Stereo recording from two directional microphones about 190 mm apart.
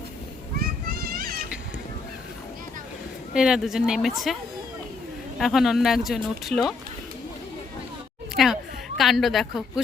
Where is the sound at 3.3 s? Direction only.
5° right (ahead or behind).